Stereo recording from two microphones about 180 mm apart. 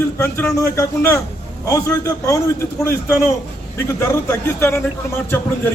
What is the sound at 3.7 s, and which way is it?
Speech, 15° left (ahead or behind).